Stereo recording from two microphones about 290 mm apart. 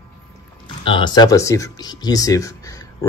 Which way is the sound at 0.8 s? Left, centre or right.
Centre.